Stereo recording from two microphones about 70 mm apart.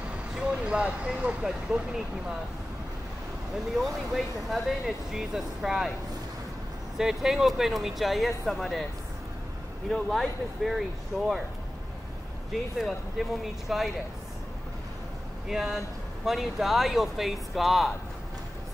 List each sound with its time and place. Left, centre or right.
0.4 s speech: centre
3.7 s speech: centre
7.0 s speech: centre
9.8 s speech: centre
12.7 s speech: centre
15.4 s speech: centre